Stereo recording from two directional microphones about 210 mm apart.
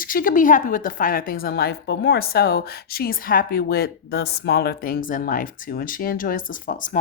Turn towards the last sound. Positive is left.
turn(degrees=40)  # may be behind; listen again after turning